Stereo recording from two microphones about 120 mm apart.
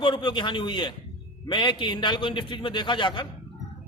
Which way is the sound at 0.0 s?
40° left (ahead or behind).